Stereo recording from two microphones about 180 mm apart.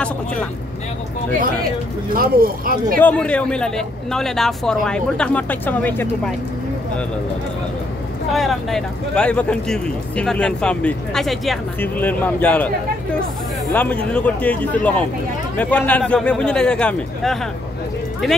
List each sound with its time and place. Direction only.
2.1 s speech: 55° right (ahead or behind)
3.0 s a man's voice: 10° left (ahead or behind)
8.3 s a man's voice: centre (ahead or behind)